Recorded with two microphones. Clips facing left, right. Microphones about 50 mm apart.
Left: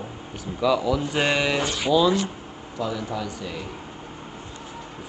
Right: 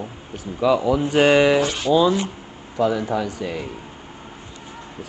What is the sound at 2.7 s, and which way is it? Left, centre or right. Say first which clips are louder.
Speech: right 8 dB; right.